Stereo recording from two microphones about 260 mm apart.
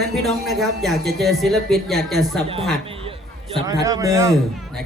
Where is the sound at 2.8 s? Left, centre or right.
Right.